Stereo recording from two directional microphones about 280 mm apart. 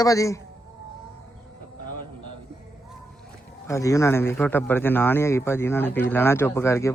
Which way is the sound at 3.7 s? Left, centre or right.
Centre.